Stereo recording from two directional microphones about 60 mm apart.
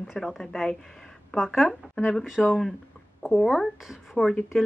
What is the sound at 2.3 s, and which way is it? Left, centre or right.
Speech, centre.